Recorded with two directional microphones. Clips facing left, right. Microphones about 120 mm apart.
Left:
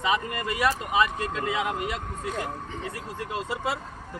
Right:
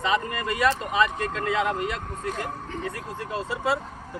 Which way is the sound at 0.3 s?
5° left (ahead or behind).